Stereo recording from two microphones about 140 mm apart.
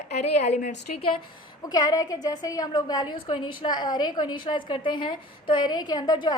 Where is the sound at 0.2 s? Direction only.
55° left (ahead or behind).